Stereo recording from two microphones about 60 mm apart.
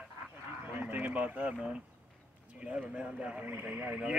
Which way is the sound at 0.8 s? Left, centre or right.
Right.